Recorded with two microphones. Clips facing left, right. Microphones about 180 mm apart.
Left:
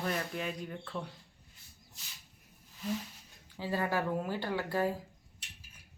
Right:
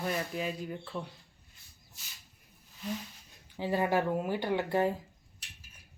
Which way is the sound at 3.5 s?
20° right (ahead or behind).